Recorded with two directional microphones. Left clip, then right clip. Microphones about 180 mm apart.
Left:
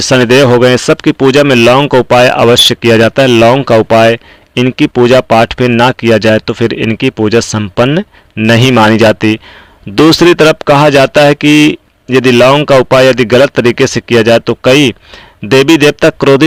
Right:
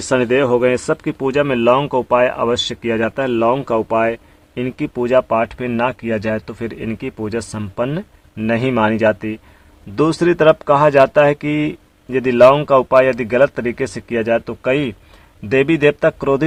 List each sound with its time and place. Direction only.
0.0 s speech: 40° left (ahead or behind)
0.6 s speech: 35° left (ahead or behind)
1.8 s speech: 35° left (ahead or behind)